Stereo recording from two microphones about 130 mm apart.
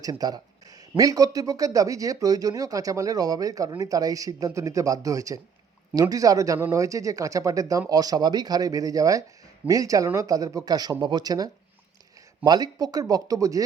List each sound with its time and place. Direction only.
0.0 s speech: 30° right (ahead or behind)